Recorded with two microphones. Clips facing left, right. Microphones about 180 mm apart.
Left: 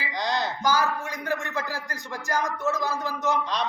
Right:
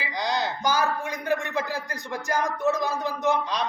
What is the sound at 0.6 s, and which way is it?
Speech, 15° right (ahead or behind).